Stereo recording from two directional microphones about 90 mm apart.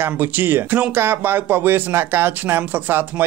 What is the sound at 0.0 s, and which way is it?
Speech, 25° right (ahead or behind).